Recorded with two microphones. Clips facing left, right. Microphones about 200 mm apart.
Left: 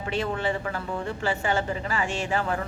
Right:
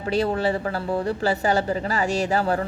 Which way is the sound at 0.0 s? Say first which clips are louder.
Right 5 dB; 35° right (ahead or behind).